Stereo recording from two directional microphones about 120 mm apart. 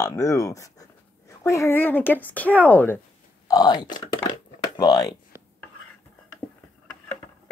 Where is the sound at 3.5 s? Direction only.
35° left (ahead or behind).